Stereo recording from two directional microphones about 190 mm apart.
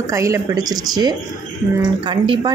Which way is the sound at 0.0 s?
15° right (ahead or behind).